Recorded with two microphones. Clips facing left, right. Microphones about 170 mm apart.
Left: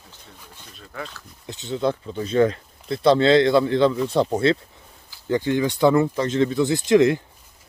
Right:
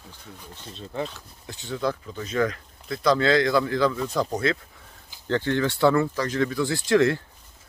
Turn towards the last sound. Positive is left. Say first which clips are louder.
# left 4 dB
turn(degrees=20)  # may be behind; listen again after turning